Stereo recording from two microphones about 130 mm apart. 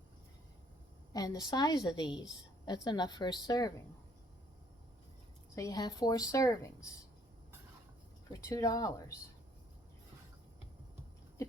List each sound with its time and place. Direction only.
1.1 s a woman's voice: 30° left (ahead or behind)
5.5 s a woman's voice: 30° left (ahead or behind)
8.3 s a woman's voice: 25° left (ahead or behind)